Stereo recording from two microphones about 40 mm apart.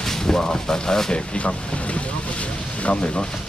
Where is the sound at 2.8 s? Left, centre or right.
Left.